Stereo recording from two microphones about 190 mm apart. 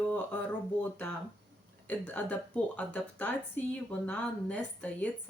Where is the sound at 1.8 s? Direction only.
10° left (ahead or behind).